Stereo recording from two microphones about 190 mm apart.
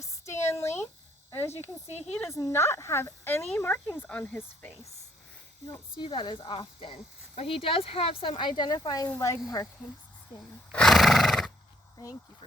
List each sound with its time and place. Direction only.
0.3 s a sound: 15° left (ahead or behind)
1.3 s speech: 15° left (ahead or behind)
1.9 s speech: 35° left (ahead or behind)
2.1 s speech: 15° left (ahead or behind)
5.6 s speech: 20° left (ahead or behind)
10.7 s horse: 5° left (ahead or behind)